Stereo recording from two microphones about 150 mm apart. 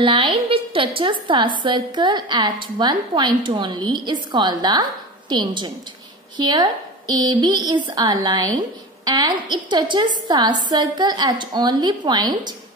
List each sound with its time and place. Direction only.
0.0 s a woman's voice: 35° right (ahead or behind)